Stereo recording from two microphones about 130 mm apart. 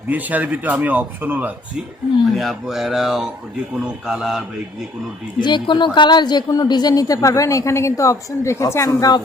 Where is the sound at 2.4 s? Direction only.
Centre (ahead or behind).